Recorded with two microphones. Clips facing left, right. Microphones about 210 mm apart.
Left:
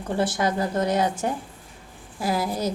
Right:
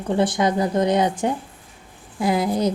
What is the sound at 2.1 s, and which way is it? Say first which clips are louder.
Speech: right 5 dB; 20° right (ahead or behind).